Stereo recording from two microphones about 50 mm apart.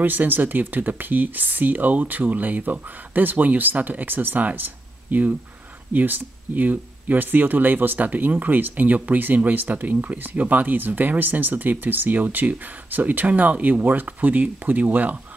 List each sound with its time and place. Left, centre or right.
0.0 s speech: right